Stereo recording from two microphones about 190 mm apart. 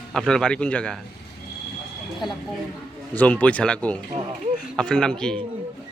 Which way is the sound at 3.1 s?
5° left (ahead or behind).